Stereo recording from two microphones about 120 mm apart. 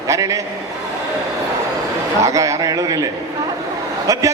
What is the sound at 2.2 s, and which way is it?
Speech, 25° right (ahead or behind).